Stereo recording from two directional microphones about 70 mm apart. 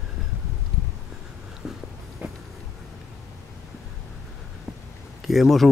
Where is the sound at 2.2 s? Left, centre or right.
Right.